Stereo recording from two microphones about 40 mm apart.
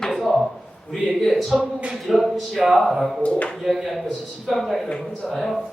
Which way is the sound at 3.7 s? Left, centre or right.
Centre.